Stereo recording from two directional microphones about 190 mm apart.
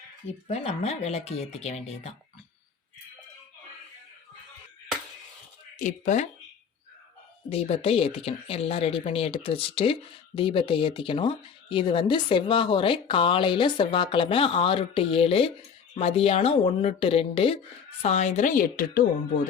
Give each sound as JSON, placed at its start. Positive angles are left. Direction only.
{"t": 0.4, "sound": "speech", "side_deg": 35}
{"t": 5.8, "sound": "speech", "side_deg": 40}
{"t": 7.5, "sound": "speech", "side_deg": 30}